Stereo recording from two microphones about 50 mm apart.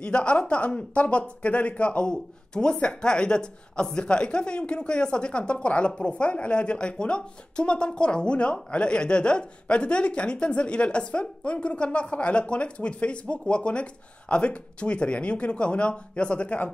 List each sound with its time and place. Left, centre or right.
0.0 s speech: left